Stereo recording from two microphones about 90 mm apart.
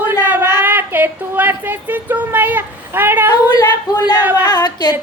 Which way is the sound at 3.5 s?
45° left (ahead or behind).